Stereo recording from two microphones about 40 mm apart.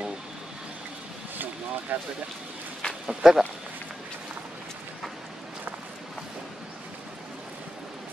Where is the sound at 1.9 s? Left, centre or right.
Right.